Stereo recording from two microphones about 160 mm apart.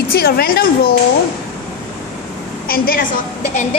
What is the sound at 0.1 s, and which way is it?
Speech, 75° left (ahead or behind).